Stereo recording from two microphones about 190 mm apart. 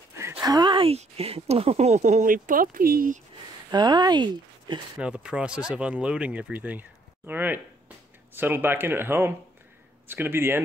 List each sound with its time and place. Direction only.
0.1 s speech: 15° right (ahead or behind); by 3.2 s 50° right (ahead or behind)
3.7 s speech: 20° right (ahead or behind)
4.9 s speech: 5° right (ahead or behind)